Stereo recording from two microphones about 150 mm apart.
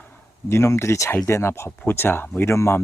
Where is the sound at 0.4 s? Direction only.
15° left (ahead or behind).